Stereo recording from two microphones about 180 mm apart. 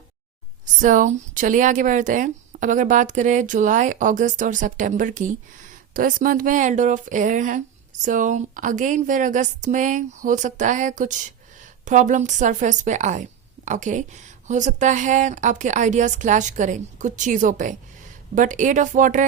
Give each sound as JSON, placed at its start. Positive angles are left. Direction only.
{"t": 0.6, "sound": "speech", "side_deg": -45}